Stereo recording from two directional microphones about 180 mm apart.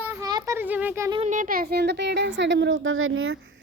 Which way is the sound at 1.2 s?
45° right (ahead or behind).